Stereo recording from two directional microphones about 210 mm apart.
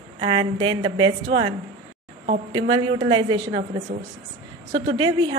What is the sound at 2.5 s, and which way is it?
A woman's voice, 25° right (ahead or behind).